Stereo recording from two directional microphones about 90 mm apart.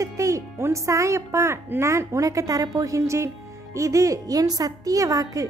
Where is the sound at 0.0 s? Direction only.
35° right (ahead or behind).